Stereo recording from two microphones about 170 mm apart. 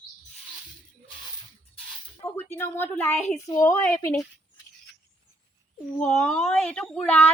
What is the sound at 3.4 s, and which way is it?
Speech, 20° left (ahead or behind).